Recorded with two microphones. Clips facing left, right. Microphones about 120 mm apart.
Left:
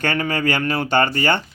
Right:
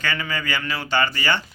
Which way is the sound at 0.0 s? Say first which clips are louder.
Left 6 dB; 55° left (ahead or behind).